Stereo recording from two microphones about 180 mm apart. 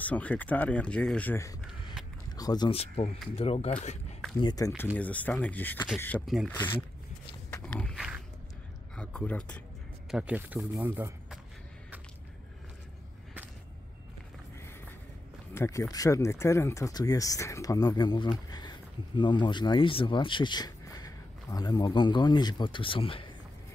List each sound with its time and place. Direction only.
0.0 s speech: 10° left (ahead or behind)
2.3 s speech: 20° left (ahead or behind)
3.3 s speech: 35° left (ahead or behind)
4.4 s speech: 20° left (ahead or behind)
4.9 s speech: 10° left (ahead or behind)
6.2 s speech: centre (ahead or behind)
6.5 s speech: 10° left (ahead or behind)
7.6 s walk: 5° left (ahead or behind)
8.9 s speech: 5° left (ahead or behind)
10.1 s speech: 5° right (ahead or behind)
15.5 s speech: 15° left (ahead or behind)